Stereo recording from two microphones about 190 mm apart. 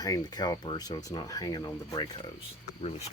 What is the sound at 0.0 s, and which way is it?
Speech, 20° left (ahead or behind).